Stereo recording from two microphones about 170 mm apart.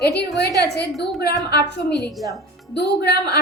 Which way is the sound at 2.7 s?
85° left.